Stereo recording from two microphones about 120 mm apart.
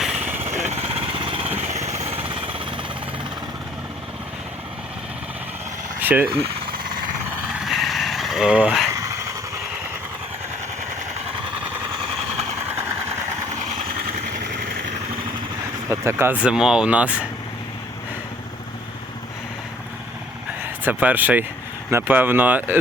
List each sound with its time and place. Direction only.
0.0 s jackhammer: 10° right (ahead or behind)
0.3 s jackhammer: 65° right (ahead or behind)
0.7 s lawn mower: 55° right (ahead or behind)
1.6 s vehicle: 65° right (ahead or behind)
2.1 s jackhammer: 45° right (ahead or behind)
6.0 s vehicle: 15° right (ahead or behind)
7.4 s a sound: 5° right (ahead or behind)
8.9 s vehicle: 25° right (ahead or behind)
15.9 s speech: 20° right (ahead or behind)
20.8 s speech: 15° right (ahead or behind)